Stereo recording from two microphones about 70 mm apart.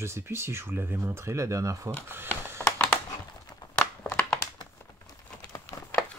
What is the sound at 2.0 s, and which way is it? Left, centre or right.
Speech, right.